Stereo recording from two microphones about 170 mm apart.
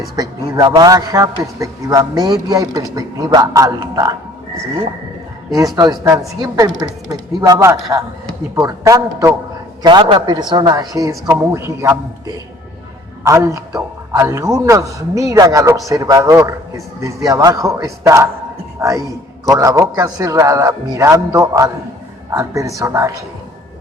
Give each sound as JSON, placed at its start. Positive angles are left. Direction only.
{"t": 0.2, "sound": "a man's voice", "side_deg": -20}
{"t": 5.7, "sound": "a man's voice", "side_deg": -20}